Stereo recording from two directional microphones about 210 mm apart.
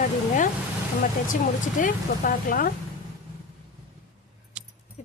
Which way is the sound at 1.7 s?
40° left (ahead or behind).